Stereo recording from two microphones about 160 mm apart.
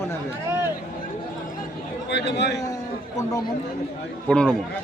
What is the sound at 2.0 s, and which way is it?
Speech, 90° left.